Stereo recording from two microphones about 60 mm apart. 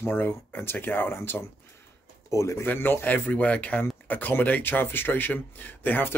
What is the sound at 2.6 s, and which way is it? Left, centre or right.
Speech, left.